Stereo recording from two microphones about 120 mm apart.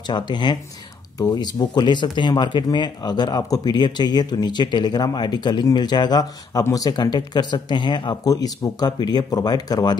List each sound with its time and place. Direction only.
0.1 s speech: 40° left (ahead or behind)